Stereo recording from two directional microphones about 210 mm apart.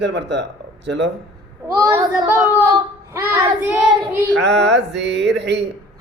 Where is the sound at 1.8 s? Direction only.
10° right (ahead or behind).